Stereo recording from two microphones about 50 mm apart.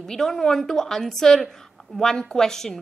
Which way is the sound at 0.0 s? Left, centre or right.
Centre.